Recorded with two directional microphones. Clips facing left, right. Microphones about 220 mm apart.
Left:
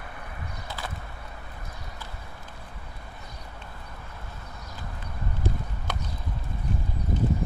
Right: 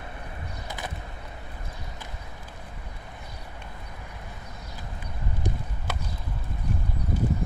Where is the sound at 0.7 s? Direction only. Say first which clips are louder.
Right 1 dB; 20° right (ahead or behind).